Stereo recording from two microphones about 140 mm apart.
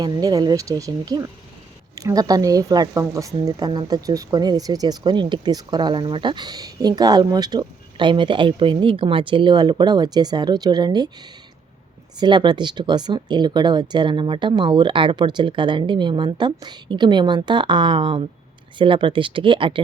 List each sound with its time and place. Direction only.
0.0 s a woman's voice: 25° right (ahead or behind)
12.1 s speech: 35° right (ahead or behind)